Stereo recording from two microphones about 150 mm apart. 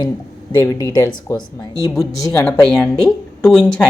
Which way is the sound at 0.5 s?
20° left (ahead or behind).